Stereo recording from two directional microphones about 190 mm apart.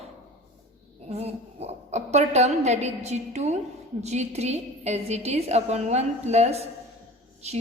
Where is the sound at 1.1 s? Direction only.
35° right (ahead or behind).